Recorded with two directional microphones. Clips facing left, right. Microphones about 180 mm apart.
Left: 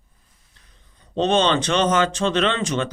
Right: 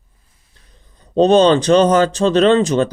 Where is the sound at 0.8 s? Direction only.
35° right (ahead or behind).